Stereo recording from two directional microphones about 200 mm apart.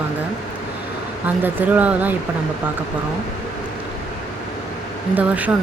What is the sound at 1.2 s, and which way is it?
Speech, 10° right (ahead or behind).